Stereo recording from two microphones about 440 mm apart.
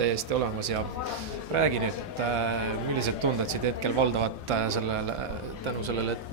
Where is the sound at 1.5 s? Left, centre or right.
Right.